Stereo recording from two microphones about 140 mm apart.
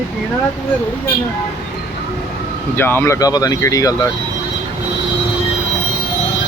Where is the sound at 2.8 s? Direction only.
15° left (ahead or behind).